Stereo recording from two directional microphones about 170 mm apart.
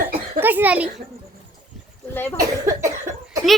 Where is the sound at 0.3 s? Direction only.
10° right (ahead or behind).